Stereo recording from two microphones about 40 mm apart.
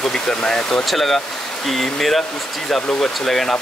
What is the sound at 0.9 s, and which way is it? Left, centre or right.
Speech, centre.